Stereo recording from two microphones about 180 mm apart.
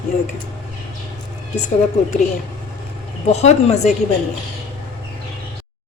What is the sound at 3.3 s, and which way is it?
Speech, 35° left (ahead or behind).